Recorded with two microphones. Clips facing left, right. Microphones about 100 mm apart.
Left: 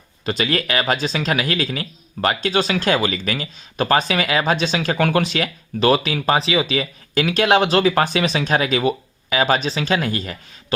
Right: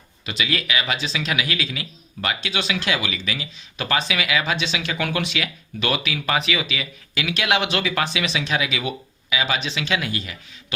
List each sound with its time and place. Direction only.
0.3 s speech: 40° left (ahead or behind)